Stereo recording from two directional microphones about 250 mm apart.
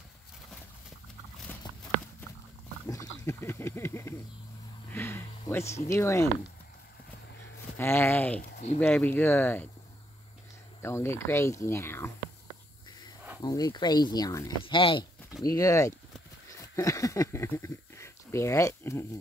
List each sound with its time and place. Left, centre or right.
1.5 s horse: centre
3.3 s hiss: centre
4.9 s a sound: centre
5.9 s speech: centre
7.7 s speech: centre
8.4 s speech: left
8.7 s speech: centre
10.8 s speech: centre
13.4 s speech: centre
16.4 s a sound: centre